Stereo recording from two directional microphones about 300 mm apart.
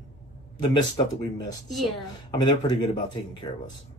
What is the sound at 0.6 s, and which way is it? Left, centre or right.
Speech, centre.